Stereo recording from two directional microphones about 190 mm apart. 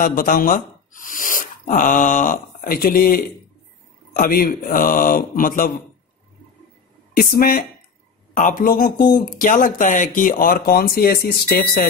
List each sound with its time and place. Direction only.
0.0 s speech: 45° left (ahead or behind)
7.2 s speech: 50° left (ahead or behind)